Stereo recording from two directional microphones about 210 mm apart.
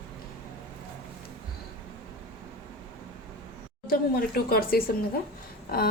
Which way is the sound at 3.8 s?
45° left (ahead or behind).